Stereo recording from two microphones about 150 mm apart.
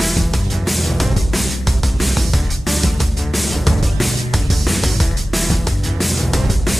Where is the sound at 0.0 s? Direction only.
Centre (ahead or behind).